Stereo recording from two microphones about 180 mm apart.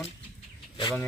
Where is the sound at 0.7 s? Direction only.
25° left (ahead or behind).